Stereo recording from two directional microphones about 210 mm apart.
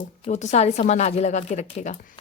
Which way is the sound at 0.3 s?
35° left (ahead or behind).